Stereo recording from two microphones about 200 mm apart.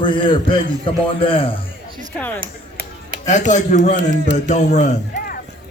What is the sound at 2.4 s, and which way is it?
Chop, 45° right (ahead or behind).